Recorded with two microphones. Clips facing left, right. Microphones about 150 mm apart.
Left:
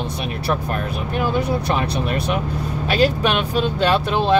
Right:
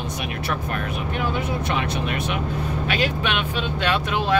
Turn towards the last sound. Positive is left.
turn(degrees=30)  # may be behind; listen again after turning